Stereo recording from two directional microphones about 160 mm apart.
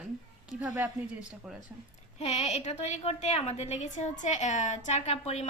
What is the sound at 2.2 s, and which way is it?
A woman's voice, 45° left (ahead or behind).